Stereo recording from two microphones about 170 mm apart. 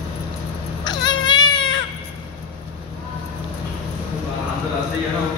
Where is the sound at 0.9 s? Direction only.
25° left (ahead or behind).